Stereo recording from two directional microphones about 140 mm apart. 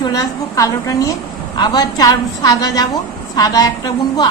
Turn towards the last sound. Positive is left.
turn(degrees=30)  # may be behind; listen again after turning